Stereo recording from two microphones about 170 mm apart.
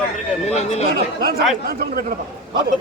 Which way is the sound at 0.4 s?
40° left (ahead or behind).